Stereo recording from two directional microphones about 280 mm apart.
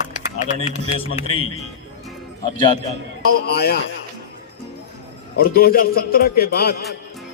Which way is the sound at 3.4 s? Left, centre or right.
Left.